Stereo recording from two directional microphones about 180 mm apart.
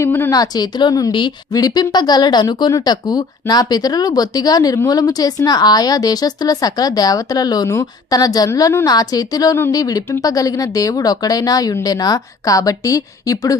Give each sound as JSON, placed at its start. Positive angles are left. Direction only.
{"t": 0.0, "sound": "a woman's voice", "side_deg": 15}